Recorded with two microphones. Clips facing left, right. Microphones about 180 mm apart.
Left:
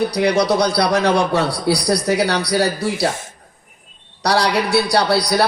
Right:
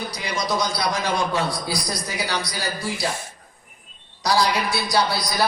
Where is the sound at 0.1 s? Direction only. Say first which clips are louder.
Left 10 dB; 65° left (ahead or behind).